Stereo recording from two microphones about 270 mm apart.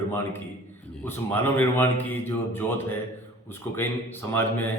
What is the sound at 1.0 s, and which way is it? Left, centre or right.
A man's voice, centre.